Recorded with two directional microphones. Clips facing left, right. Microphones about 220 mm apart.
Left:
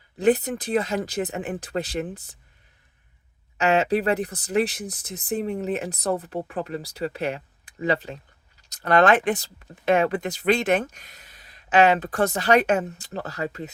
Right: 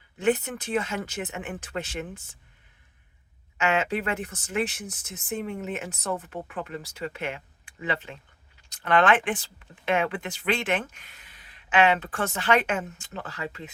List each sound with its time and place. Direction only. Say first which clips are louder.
0.2 s speech: left 4 dB; 35° left (ahead or behind)
3.6 s speech: left 5 dB; 35° left (ahead or behind)